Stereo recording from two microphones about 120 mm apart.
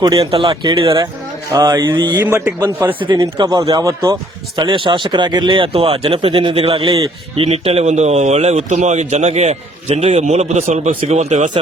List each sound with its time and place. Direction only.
0.2 s speech: 50° right (ahead or behind)
2.2 s a man's voice: 15° right (ahead or behind)
2.8 s a man's voice: 30° right (ahead or behind); by 11.5 s 75° right (ahead or behind)